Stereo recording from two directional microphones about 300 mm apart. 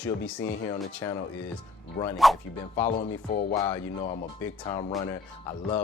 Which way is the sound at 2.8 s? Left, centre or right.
Left.